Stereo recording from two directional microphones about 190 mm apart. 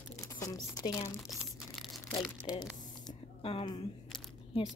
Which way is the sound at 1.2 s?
Centre (ahead or behind).